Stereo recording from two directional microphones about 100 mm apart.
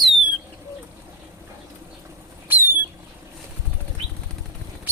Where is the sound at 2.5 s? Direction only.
20° right (ahead or behind).